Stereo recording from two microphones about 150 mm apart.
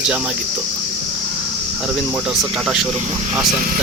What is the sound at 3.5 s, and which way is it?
Speech, 65° right (ahead or behind).